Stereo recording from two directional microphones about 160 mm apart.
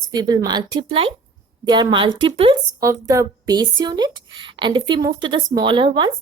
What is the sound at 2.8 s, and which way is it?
Speech, 20° right (ahead or behind).